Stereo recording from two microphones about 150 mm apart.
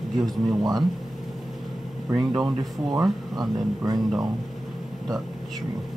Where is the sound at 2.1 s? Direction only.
25° right (ahead or behind).